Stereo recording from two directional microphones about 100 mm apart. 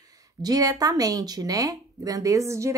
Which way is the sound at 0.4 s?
40° right (ahead or behind).